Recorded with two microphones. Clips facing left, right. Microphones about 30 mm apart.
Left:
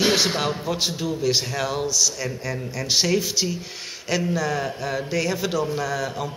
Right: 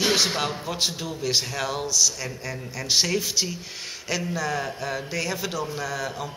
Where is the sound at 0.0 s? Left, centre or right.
Centre.